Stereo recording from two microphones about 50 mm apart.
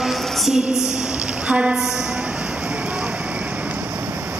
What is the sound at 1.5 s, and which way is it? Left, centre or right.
Speech, right.